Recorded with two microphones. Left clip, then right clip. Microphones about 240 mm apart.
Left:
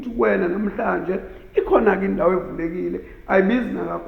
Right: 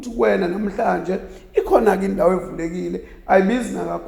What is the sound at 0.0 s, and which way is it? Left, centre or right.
Speech, right.